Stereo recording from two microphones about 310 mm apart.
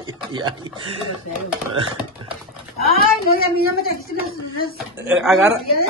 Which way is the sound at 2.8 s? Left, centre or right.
Left.